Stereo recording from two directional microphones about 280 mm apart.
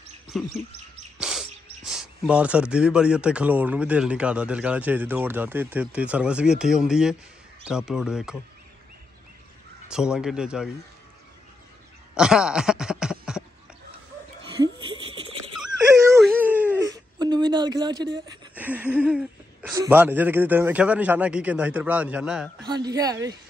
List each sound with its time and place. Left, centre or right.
0.3 s speech: centre
9.8 s speech: centre
12.2 s speech: centre
14.6 s a sound: centre
15.5 s whimper: centre
16.7 s a sound: centre
18.5 s speech: centre
22.8 s a woman's voice: centre